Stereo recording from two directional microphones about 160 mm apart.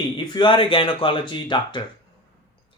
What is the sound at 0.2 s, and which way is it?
Speech, 30° left (ahead or behind).